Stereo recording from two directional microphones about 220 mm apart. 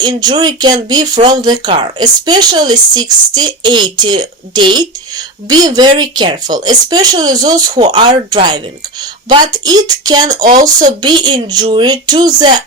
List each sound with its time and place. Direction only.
0.0 s speech: 20° right (ahead or behind)
10.4 s speech: 35° right (ahead or behind)
10.8 s speech: 20° right (ahead or behind)